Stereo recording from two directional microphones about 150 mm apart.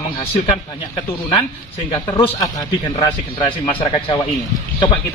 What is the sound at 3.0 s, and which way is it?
Speech, 30° left (ahead or behind).